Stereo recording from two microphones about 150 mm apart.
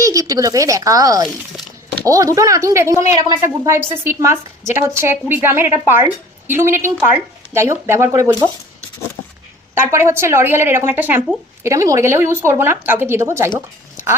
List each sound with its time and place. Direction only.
0.0 s a woman's voice: 20° right (ahead or behind)
9.7 s speech: 15° right (ahead or behind)
13.9 s a sound: 20° right (ahead or behind)